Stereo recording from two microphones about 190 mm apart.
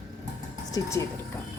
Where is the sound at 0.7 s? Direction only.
20° left (ahead or behind).